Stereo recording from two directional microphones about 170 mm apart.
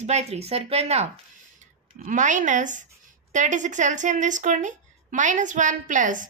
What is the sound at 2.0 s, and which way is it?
A woman's voice, 50° right (ahead or behind).